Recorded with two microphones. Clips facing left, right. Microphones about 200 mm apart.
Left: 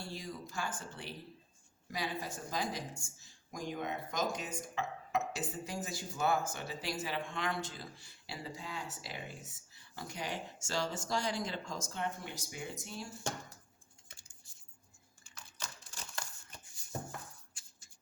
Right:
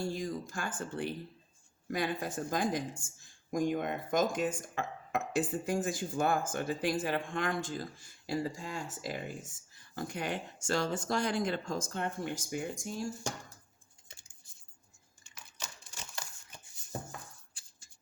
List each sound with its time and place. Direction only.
0.0 s speech: 45° right (ahead or behind)